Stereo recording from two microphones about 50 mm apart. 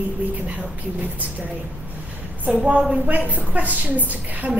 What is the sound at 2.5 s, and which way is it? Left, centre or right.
A woman's voice, right.